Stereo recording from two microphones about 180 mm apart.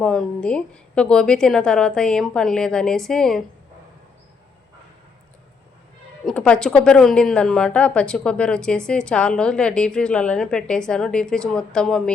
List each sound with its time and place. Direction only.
0.0 s a woman's voice: 5° left (ahead or behind)
6.2 s a woman's voice: 5° left (ahead or behind)